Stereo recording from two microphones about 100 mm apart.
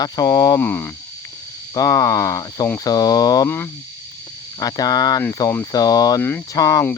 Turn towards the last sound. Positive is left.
turn(degrees=35)  # may be behind; listen again after turning